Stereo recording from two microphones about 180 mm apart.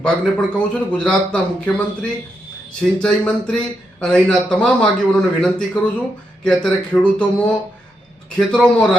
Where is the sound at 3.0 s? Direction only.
5° left (ahead or behind).